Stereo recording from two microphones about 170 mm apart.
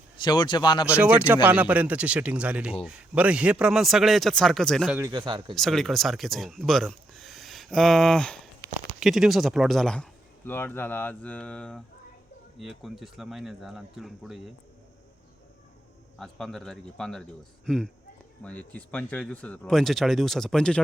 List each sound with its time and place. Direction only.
0.2 s a man's voice: 25° left (ahead or behind)
0.9 s a man's voice: 10° right (ahead or behind)
4.9 s speech: 20° right (ahead or behind)
5.5 s speech: centre (ahead or behind)
16.1 s speech: centre (ahead or behind)